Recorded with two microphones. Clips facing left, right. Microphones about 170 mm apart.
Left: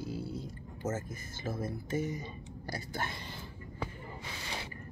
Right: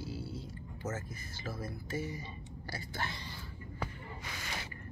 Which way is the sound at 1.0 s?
50° left (ahead or behind).